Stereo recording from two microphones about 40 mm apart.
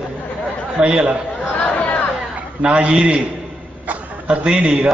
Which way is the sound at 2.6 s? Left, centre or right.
Right.